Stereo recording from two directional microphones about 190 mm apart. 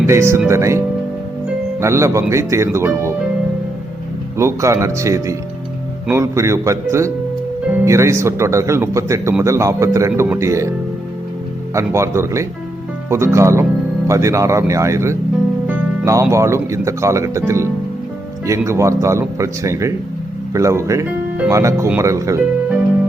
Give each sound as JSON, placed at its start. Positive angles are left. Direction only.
{"t": 0.0, "sound": "speech", "side_deg": -15}
{"t": 1.8, "sound": "speech", "side_deg": -15}
{"t": 4.4, "sound": "speech", "side_deg": -15}
{"t": 11.7, "sound": "speech", "side_deg": -15}